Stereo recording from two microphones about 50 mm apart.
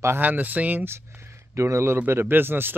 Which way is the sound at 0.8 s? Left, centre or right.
Right.